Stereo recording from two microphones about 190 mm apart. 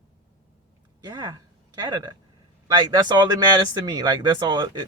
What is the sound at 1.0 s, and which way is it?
Speech, 20° right (ahead or behind).